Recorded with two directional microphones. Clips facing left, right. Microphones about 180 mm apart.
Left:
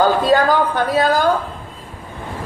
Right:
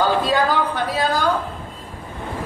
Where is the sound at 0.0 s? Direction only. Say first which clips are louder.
Left 4 dB; 45° left (ahead or behind).